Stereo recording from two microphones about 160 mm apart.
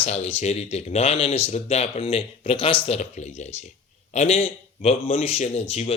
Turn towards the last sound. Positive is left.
turn(degrees=40)  # may be behind; listen again after turning